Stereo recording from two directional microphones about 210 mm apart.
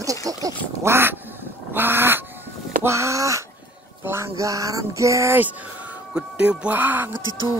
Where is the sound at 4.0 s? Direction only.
10° right (ahead or behind).